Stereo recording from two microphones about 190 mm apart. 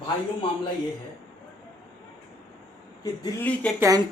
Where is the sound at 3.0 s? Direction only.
20° left (ahead or behind).